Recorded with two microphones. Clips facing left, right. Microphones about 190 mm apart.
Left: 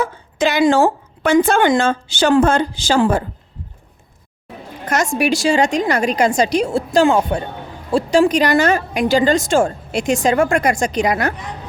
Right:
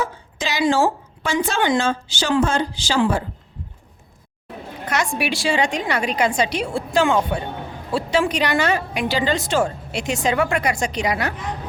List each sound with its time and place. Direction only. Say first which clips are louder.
0.0 s speech: left 7 dB; 55° left (ahead or behind)
4.9 s a woman's voice: left 6 dB; 45° left (ahead or behind)